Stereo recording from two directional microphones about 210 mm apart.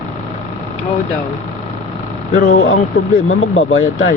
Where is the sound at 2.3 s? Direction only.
35° left (ahead or behind).